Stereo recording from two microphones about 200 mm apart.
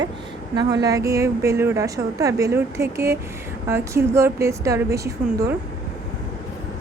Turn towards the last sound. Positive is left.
turn(degrees=-15)  # may be behind; listen again after turning